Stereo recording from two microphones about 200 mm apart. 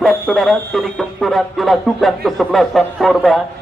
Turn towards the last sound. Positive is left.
turn(degrees=0)  # may be behind; listen again after turning